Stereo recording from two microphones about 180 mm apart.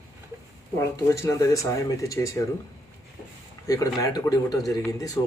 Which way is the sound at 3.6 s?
20° left (ahead or behind).